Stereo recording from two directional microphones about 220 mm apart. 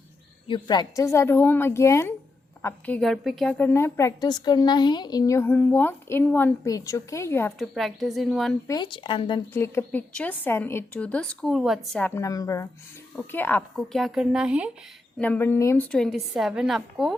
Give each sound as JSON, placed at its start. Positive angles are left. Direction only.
{"t": 0.4, "sound": "a woman's voice", "side_deg": 20}
{"t": 8.6, "sound": "speech", "side_deg": 20}
{"t": 9.5, "sound": "a woman's voice", "side_deg": 10}
{"t": 15.2, "sound": "a woman's voice", "side_deg": 10}